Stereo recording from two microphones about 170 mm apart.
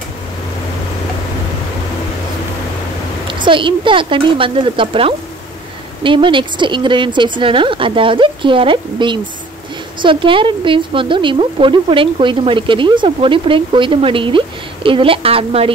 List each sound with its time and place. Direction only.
3.3 s speech: 30° right (ahead or behind)